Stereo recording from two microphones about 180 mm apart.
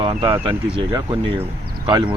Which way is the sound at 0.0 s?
30° right (ahead or behind).